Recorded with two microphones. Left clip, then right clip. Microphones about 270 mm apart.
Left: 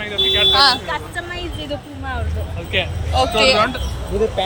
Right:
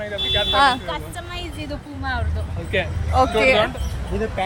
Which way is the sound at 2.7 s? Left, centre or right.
Right.